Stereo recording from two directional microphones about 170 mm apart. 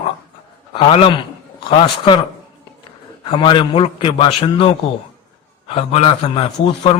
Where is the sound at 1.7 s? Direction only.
30° left (ahead or behind).